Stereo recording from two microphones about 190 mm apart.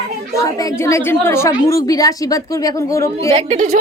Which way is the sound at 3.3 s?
35° right (ahead or behind).